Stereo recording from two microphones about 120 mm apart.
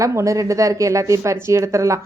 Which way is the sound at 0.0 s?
25° right (ahead or behind).